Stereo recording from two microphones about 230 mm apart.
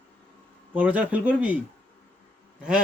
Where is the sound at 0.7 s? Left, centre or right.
Centre.